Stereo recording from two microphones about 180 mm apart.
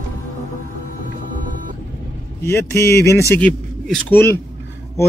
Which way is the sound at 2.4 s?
15° left (ahead or behind).